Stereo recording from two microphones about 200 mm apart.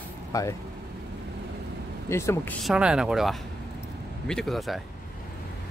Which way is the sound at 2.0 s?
15° left (ahead or behind).